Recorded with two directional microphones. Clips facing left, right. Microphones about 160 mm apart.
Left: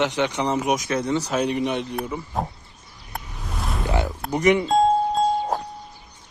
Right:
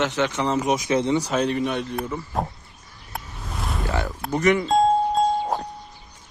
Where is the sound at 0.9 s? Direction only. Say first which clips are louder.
Right 2 dB; 20° right (ahead or behind).